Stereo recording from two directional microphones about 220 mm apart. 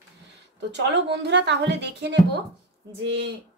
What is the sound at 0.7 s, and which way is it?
A woman's voice, 50° right (ahead or behind).